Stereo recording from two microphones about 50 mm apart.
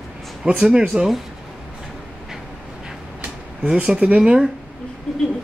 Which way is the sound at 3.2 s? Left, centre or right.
Right.